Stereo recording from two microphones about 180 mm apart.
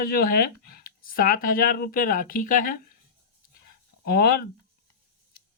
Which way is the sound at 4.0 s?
60° left (ahead or behind).